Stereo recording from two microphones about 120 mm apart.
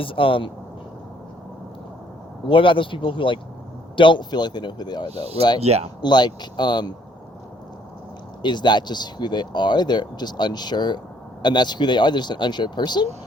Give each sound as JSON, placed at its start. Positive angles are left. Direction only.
{"t": 0.0, "sound": "speech", "side_deg": 50}
{"t": 2.5, "sound": "speech", "side_deg": 45}
{"t": 5.0, "sound": "speech", "side_deg": -55}
{"t": 6.0, "sound": "speech", "side_deg": 35}
{"t": 8.4, "sound": "speech", "side_deg": 40}